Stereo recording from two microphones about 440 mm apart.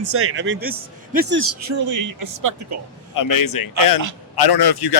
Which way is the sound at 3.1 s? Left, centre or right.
Left.